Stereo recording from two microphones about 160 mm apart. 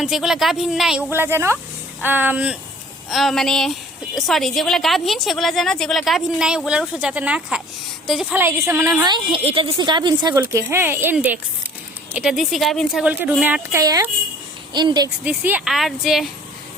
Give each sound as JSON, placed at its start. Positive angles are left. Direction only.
{"t": 0.0, "sound": "a woman's voice", "side_deg": -5}
{"t": 1.1, "sound": "a woman's voice", "side_deg": -15}
{"t": 8.3, "sound": "a woman's voice", "side_deg": -15}
{"t": 10.4, "sound": "a woman's voice", "side_deg": -15}
{"t": 13.8, "sound": "a woman's voice", "side_deg": -20}
{"t": 15.2, "sound": "a woman's voice", "side_deg": -10}